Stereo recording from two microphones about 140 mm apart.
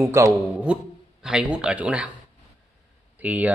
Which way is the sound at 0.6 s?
5° right (ahead or behind).